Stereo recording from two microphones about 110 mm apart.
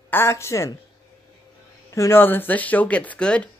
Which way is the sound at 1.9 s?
25° left (ahead or behind).